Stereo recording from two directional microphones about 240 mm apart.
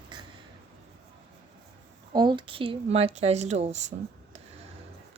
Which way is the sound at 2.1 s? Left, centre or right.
Centre.